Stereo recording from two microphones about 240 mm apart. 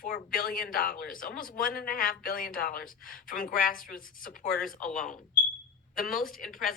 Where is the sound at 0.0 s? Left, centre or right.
Left.